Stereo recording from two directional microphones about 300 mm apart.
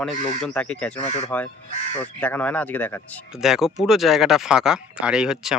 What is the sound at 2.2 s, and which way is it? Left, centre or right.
Speech, centre.